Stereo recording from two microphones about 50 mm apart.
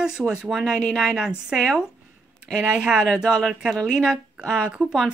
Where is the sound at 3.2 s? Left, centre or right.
Centre.